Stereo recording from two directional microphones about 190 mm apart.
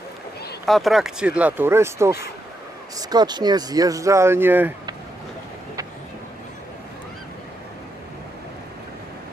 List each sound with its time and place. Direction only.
0.6 s speech: centre (ahead or behind)